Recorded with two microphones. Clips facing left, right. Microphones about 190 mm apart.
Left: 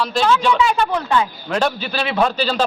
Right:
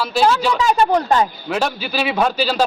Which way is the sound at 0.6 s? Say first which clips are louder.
Right 2 dB; 40° right (ahead or behind).